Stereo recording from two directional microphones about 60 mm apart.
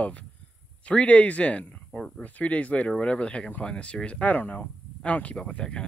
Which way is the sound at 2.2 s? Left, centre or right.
Left.